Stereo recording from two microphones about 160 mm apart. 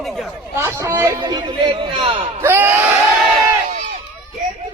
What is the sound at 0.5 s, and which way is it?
Speech, 15° right (ahead or behind).